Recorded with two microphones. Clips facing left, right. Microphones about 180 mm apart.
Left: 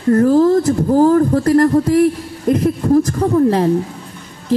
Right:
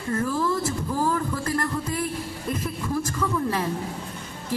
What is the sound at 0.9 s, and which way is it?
Speech, 65° left (ahead or behind).